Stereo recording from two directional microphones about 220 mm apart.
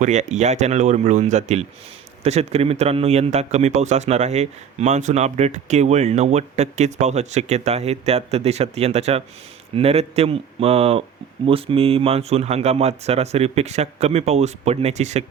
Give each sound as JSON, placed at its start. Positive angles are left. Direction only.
{"t": 0.0, "sound": "a man's voice", "side_deg": -30}